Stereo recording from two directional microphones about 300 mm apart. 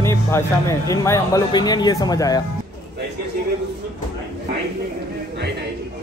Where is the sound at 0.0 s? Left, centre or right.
Centre.